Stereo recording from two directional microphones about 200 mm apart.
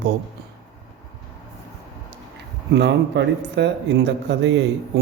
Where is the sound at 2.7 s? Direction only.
60° right (ahead or behind).